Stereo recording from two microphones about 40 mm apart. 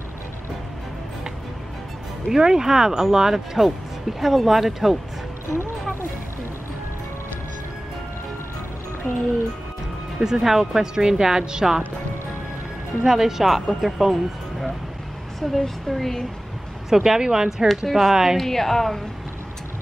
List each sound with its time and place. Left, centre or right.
2.2 s speech: centre
9.1 s speech: centre
10.1 s speech: centre
13.0 s speech: centre
15.4 s speech: centre
16.9 s speech: centre
17.8 s speech: centre
18.1 s speech: centre
18.4 s speech: centre